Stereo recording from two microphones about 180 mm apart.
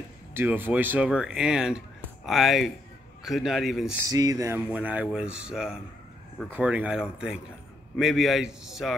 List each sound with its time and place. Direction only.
0.3 s a man's voice: 10° right (ahead or behind)
4.1 s speech: 20° right (ahead or behind)
4.7 s a man's voice: 5° right (ahead or behind)